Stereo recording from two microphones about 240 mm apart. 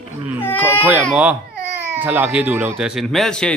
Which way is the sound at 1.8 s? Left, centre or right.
Centre.